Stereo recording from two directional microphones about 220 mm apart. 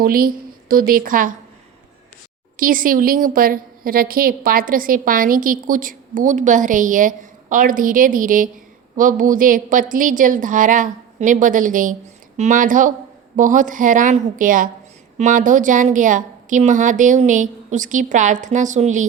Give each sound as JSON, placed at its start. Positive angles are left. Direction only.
{"t": 0.0, "sound": "a woman's voice", "side_deg": -40}
{"t": 2.6, "sound": "a woman's voice", "side_deg": -40}